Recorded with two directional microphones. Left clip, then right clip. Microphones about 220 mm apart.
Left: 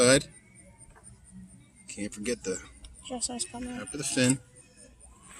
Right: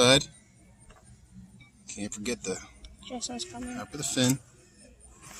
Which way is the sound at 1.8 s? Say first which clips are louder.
Left 1 dB; 30° right (ahead or behind).